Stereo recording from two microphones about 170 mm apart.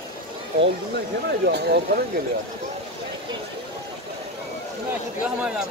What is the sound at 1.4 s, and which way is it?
Speech, 75° right (ahead or behind).